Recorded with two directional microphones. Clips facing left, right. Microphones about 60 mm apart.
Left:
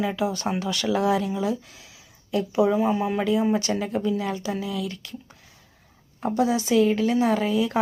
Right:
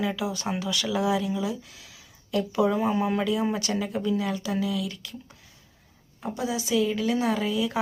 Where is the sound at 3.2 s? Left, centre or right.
Left.